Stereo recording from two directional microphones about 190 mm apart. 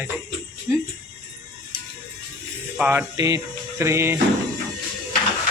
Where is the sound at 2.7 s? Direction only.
5° right (ahead or behind).